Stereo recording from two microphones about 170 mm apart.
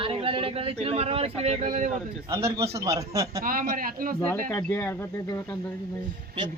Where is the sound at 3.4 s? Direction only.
55° right (ahead or behind).